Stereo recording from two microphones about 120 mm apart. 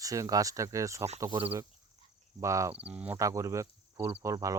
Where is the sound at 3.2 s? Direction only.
25° right (ahead or behind).